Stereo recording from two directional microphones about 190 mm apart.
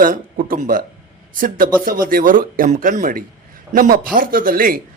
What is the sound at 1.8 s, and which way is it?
A man's voice, 50° right (ahead or behind).